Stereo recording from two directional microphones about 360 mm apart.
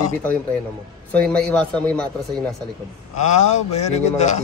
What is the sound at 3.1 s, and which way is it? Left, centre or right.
A man's voice, centre.